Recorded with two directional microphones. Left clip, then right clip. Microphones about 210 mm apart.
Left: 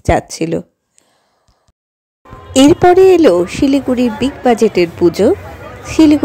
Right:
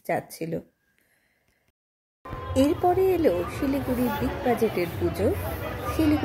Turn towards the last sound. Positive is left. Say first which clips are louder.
# left 15 dB
turn(degrees=40)  # may be behind; listen again after turning